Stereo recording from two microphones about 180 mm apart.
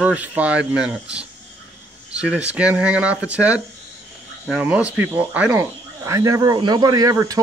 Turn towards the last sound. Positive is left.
turn(degrees=-20)  # may be behind; listen again after turning